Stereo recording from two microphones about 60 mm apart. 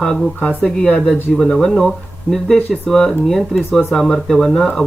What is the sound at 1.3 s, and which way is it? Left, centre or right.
Speech, centre.